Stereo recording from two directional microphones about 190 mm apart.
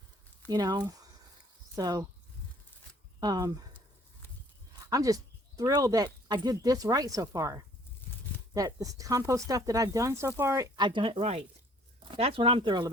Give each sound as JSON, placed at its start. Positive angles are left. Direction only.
{"t": 0.4, "sound": "speech", "side_deg": -20}
{"t": 3.2, "sound": "speech", "side_deg": -20}
{"t": 4.9, "sound": "speech", "side_deg": -20}